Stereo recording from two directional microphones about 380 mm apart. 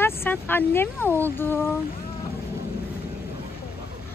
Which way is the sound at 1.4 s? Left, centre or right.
Centre.